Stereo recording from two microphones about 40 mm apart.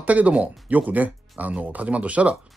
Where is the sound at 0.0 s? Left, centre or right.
Right.